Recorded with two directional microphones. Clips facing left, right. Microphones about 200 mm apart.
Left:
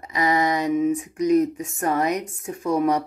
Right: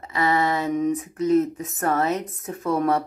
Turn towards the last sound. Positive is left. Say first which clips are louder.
# left 1 dB
turn(degrees=15)  # may be behind; listen again after turning